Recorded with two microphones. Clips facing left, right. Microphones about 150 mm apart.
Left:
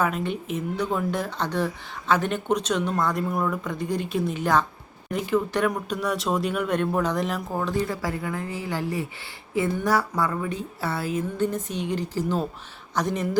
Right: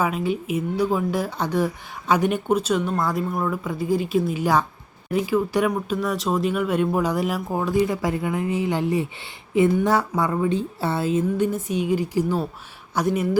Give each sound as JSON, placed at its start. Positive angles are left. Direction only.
{"t": 0.0, "sound": "a woman's voice", "side_deg": -5}
{"t": 11.3, "sound": "speech", "side_deg": -10}